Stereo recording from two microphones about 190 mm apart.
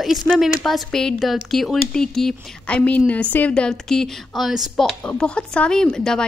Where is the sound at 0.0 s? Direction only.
Centre (ahead or behind).